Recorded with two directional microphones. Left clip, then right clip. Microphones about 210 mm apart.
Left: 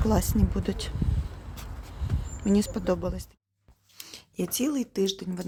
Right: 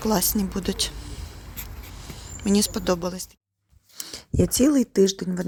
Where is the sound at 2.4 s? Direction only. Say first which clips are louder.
Right 4 dB; centre (ahead or behind).